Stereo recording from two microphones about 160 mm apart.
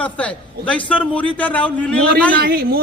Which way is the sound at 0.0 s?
10° left (ahead or behind).